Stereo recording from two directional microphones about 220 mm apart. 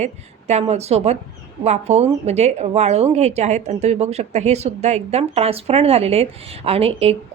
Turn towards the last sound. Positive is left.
turn(degrees=-25)  # may be behind; listen again after turning